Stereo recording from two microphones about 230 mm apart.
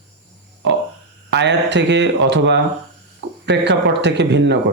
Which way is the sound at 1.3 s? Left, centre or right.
Right.